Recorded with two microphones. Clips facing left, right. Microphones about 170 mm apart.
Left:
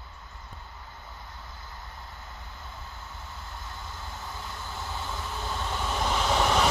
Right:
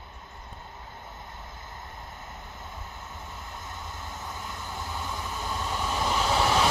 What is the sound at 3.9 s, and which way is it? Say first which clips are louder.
Vehicle: right 1 dB; 50° right (ahead or behind).